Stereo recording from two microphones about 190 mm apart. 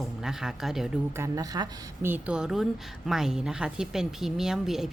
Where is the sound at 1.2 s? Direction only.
20° right (ahead or behind).